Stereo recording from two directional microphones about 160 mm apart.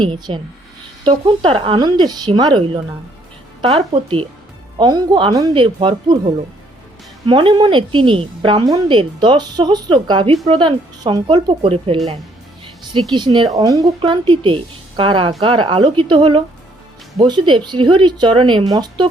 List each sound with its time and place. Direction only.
0.0 s a woman's voice: 30° right (ahead or behind)
4.8 s a woman's voice: 25° right (ahead or behind)
7.3 s a woman's voice: 30° right (ahead or behind)